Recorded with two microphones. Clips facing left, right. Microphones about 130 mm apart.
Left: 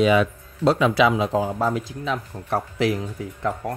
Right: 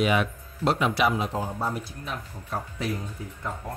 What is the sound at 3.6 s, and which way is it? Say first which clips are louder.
Speech: left 7 dB; 75° left (ahead or behind).